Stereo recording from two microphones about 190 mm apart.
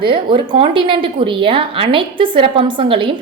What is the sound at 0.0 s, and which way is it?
A woman's voice, 25° right (ahead or behind).